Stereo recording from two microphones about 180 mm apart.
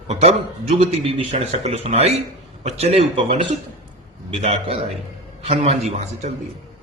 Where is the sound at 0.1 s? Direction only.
35° right (ahead or behind).